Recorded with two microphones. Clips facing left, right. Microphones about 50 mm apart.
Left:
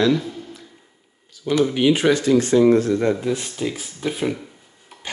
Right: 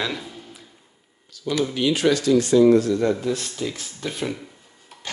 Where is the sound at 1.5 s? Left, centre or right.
Left.